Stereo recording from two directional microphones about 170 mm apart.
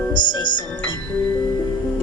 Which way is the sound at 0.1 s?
25° left (ahead or behind).